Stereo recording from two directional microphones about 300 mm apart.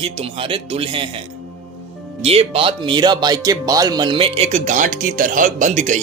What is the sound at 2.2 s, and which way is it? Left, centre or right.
Speech, centre.